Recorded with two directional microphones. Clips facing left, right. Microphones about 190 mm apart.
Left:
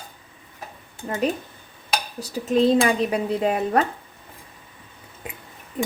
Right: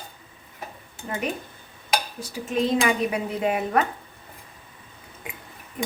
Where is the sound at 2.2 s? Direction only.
35° left (ahead or behind).